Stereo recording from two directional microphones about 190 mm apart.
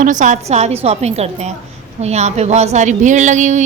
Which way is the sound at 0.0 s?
40° right (ahead or behind).